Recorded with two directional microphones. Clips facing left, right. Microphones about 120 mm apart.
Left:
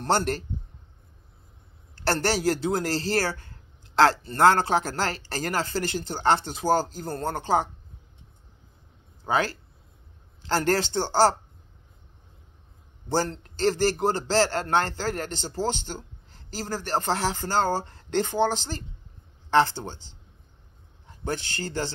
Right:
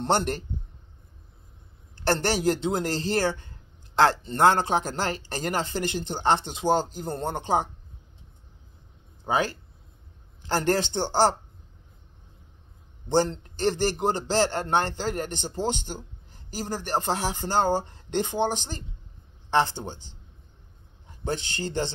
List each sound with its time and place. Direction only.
0.0 s a man's voice: 20° right (ahead or behind)
2.0 s a man's voice: 20° right (ahead or behind)
9.3 s a man's voice: 20° right (ahead or behind)
13.1 s a man's voice: 20° right (ahead or behind)
21.2 s a man's voice: 20° right (ahead or behind)